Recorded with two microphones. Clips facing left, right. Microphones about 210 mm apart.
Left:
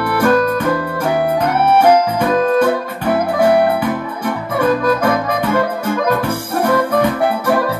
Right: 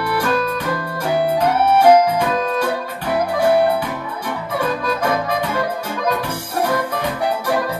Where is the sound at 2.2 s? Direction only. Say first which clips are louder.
Left 6 dB; 50° left (ahead or behind).